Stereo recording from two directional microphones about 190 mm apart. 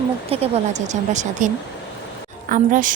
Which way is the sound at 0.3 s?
30° right (ahead or behind).